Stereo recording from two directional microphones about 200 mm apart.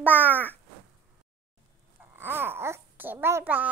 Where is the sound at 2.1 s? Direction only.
10° right (ahead or behind).